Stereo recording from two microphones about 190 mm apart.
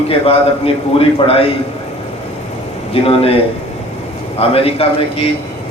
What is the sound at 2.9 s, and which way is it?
A man's voice, 30° left (ahead or behind).